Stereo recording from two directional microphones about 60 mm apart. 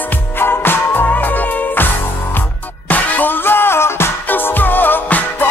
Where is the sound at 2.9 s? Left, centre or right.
Left.